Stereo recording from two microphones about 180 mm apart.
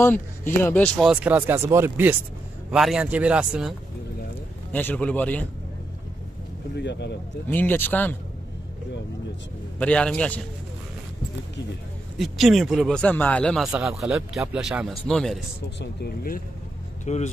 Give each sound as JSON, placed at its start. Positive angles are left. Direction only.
{"t": 0.0, "sound": "speech", "side_deg": 10}
{"t": 0.9, "sound": "speech", "side_deg": -5}
{"t": 4.7, "sound": "speech", "side_deg": 10}
{"t": 6.7, "sound": "speech", "side_deg": 75}
{"t": 7.4, "sound": "speech", "side_deg": 10}
{"t": 9.8, "sound": "speech", "side_deg": 5}
{"t": 12.2, "sound": "speech", "side_deg": 0}
{"t": 15.8, "sound": "speech", "side_deg": 60}
{"t": 17.0, "sound": "speech", "side_deg": 40}